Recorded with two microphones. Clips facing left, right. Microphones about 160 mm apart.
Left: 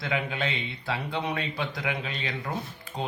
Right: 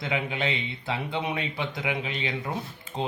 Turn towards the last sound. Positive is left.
turn(degrees=-25)  # may be behind; listen again after turning